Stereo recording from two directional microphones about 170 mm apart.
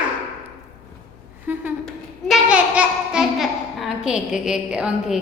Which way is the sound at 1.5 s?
10° right (ahead or behind).